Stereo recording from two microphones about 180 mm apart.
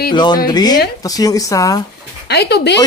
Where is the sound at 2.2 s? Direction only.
65° left (ahead or behind).